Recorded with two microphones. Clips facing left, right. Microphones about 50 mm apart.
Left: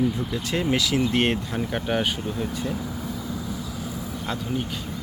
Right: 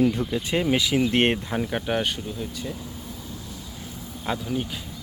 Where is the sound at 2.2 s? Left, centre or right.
Left.